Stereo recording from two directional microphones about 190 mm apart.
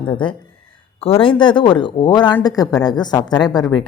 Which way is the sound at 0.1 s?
25° left (ahead or behind).